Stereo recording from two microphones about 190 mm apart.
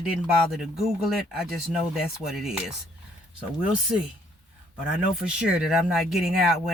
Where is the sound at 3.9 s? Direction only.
5° right (ahead or behind).